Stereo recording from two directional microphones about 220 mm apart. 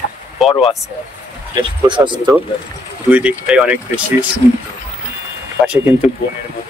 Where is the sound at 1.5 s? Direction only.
20° right (ahead or behind).